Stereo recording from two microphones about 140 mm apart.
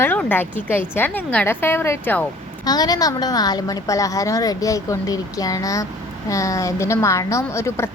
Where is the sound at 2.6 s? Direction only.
30° left (ahead or behind).